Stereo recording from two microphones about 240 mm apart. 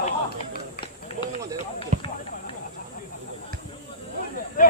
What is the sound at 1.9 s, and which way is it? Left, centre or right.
Run, right.